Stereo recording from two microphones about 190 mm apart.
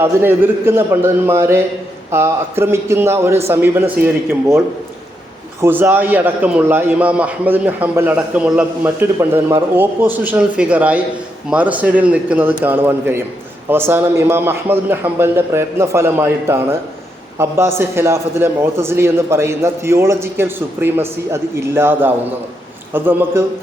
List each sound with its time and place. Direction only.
0.0 s a man's voice: 10° right (ahead or behind)
5.6 s a man's voice: 10° right (ahead or behind)